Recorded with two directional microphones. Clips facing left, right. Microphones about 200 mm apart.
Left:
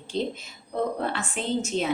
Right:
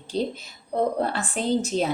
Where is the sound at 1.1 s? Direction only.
35° right (ahead or behind).